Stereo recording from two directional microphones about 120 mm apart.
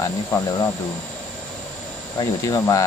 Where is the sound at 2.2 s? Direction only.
25° left (ahead or behind).